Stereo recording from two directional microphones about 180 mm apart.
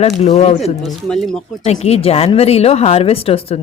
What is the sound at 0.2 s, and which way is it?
Speech, 35° left (ahead or behind).